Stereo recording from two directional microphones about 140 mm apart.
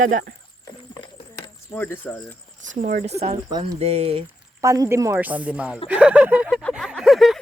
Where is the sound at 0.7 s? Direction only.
30° left (ahead or behind).